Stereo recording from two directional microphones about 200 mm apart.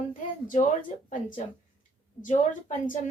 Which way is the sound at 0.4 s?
40° left (ahead or behind).